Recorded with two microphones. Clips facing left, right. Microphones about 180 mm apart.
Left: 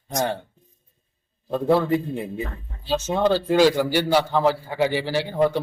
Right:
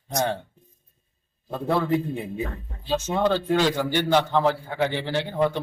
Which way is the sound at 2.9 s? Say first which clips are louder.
Left 2 dB; 5° left (ahead or behind).